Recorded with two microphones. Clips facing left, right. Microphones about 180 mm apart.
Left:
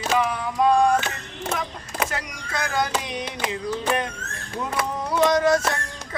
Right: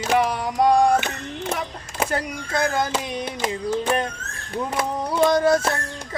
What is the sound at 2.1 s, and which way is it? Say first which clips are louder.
Speech: right 6 dB; 50° right (ahead or behind).